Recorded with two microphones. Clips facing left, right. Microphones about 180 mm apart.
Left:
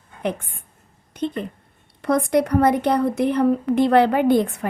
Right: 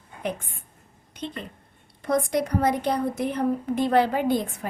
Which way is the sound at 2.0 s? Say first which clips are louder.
Left 5 dB; 65° left (ahead or behind).